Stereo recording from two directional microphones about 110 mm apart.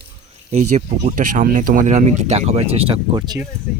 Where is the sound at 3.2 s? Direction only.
40° right (ahead or behind).